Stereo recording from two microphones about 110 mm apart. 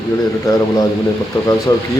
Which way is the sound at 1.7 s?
35° left (ahead or behind).